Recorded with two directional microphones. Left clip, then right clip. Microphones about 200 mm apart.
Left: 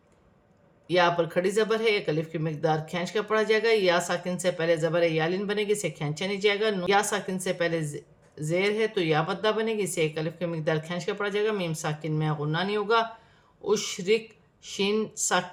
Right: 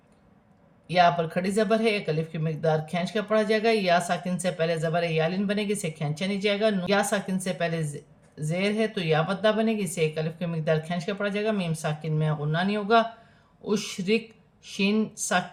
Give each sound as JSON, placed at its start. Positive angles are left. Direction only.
{"t": 0.9, "sound": "speech", "side_deg": 35}